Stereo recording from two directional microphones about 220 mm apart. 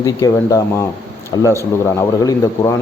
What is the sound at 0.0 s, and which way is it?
A man's voice, 15° left (ahead or behind).